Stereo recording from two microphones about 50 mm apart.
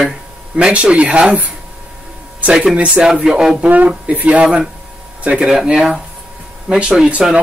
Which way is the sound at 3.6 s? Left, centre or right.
Right.